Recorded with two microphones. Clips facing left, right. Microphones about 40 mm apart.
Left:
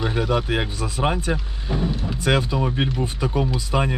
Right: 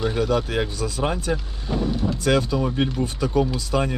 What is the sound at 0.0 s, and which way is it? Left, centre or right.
Speech, centre.